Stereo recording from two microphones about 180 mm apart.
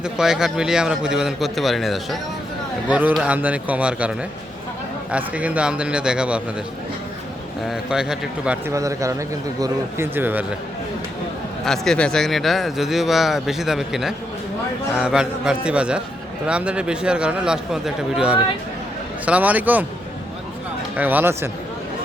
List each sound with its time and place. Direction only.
0.0 s a man's voice: 5° right (ahead or behind)
5.1 s a man's voice: 5° right (ahead or behind)
7.7 s a man's voice: 5° right (ahead or behind)
8.7 s a man's voice: 15° right (ahead or behind)
11.6 s a man's voice: centre (ahead or behind)
20.9 s a man's voice: 10° right (ahead or behind)